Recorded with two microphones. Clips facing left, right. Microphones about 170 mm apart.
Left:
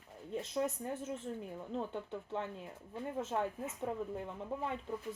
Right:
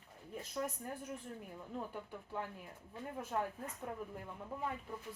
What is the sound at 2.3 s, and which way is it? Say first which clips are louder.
A woman's voice: left 1 dB; 25° left (ahead or behind).